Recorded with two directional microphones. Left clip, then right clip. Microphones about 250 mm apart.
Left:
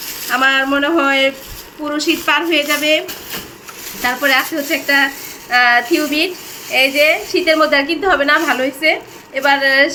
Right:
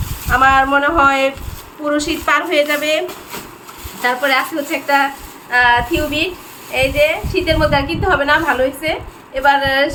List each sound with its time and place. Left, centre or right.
0.3 s a woman's voice: right
4.0 s a woman's voice: right